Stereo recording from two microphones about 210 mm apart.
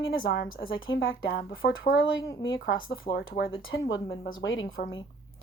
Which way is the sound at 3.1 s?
45° left (ahead or behind).